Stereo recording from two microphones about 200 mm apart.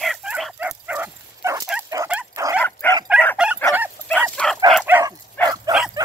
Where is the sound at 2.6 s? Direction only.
10° left (ahead or behind).